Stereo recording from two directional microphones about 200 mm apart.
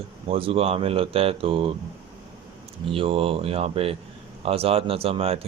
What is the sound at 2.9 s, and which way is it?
Speech, 30° right (ahead or behind).